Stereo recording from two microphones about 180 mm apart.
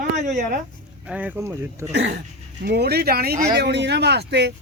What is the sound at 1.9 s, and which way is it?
Speech, 75° right (ahead or behind).